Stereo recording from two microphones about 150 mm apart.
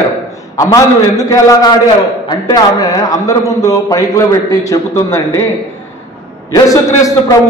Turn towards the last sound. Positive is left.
turn(degrees=20)  # may be behind; listen again after turning